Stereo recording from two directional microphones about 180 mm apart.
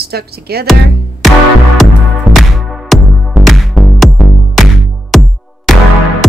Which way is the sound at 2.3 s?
Centre (ahead or behind).